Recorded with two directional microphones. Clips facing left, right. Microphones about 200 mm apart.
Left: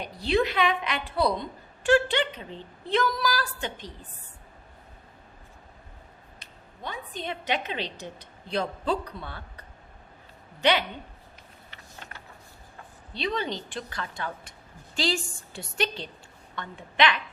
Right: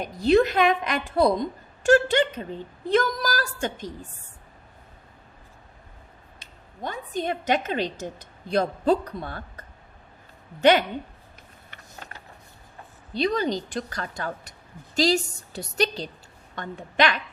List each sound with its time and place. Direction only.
0.0 s a woman's voice: 45° right (ahead or behind)
6.8 s a woman's voice: 45° right (ahead or behind)
13.1 s a woman's voice: 40° right (ahead or behind)